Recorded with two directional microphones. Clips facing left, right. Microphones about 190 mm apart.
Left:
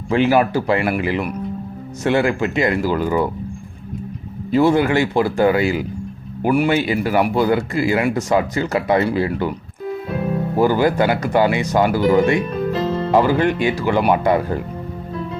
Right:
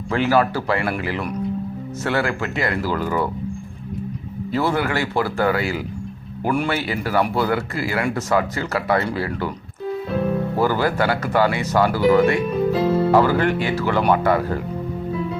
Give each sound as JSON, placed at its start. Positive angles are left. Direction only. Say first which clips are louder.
{"t": 0.1, "sound": "speech", "louder": "left 3 dB", "side_deg": 20}
{"t": 4.5, "sound": "speech", "louder": "left 7 dB", "side_deg": 20}
{"t": 6.4, "sound": "speech", "louder": "left 5 dB", "side_deg": 10}
{"t": 10.6, "sound": "speech", "louder": "left 5 dB", "side_deg": 15}
{"t": 12.5, "sound": "speech", "louder": "right 2 dB", "side_deg": -5}
{"t": 13.1, "sound": "speech", "louder": "left 5 dB", "side_deg": 15}